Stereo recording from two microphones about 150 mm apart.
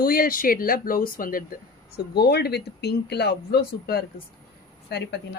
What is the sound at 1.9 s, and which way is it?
Speech, 90° left.